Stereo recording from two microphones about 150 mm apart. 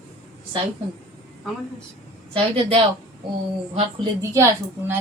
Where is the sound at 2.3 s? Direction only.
40° right (ahead or behind).